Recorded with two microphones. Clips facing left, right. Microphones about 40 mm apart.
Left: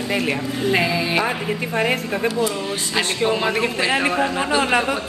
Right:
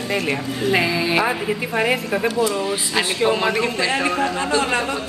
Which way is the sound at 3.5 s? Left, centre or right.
Centre.